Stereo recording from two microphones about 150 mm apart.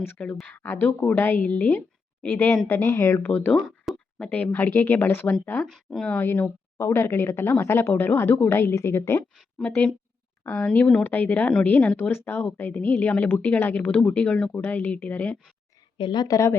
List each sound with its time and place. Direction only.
0.0 s speech: 15° left (ahead or behind)
9.3 s speech: 5° left (ahead or behind)
16.0 s a woman's voice: 30° left (ahead or behind)